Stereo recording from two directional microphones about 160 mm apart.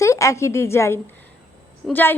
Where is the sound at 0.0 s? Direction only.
20° left (ahead or behind).